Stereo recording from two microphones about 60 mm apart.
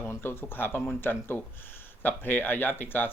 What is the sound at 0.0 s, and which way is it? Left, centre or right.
Speech, left.